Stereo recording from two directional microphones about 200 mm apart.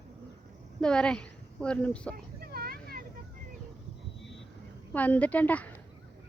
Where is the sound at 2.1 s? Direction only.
50° right (ahead or behind).